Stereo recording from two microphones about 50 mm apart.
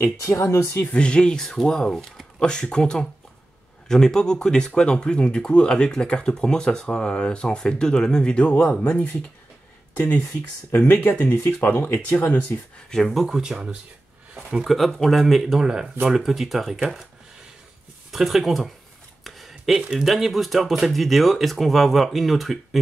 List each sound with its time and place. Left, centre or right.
0.2 s speech: left
0.9 s speech: centre
10.9 s speech: left
11.9 s speech: left
12.9 s speech: centre
13.3 s speech: centre
14.6 s speech: centre
15.6 s speech: centre
18.1 s speech: centre
19.2 s a sound: centre
19.9 s speech: centre